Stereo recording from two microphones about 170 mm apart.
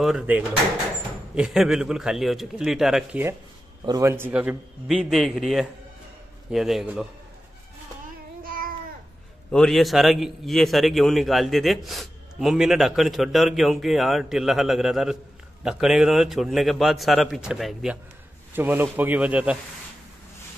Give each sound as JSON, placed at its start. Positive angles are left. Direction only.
{"t": 0.0, "sound": "a man's voice", "side_deg": -5}
{"t": 8.5, "sound": "a sound", "side_deg": -55}
{"t": 9.5, "sound": "a man's voice", "side_deg": 0}